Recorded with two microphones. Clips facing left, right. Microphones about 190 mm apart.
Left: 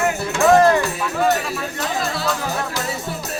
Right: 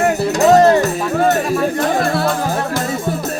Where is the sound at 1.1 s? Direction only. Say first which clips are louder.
Right 5 dB; 50° right (ahead or behind).